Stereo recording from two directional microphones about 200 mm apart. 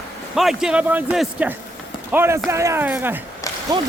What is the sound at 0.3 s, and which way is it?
A man's voice, centre (ahead or behind).